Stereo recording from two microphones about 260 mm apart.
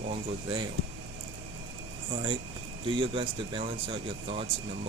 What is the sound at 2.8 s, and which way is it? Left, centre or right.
Speech, centre.